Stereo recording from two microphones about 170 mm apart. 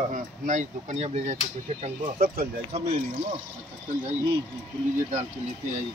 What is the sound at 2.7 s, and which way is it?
Speech, 40° right (ahead or behind).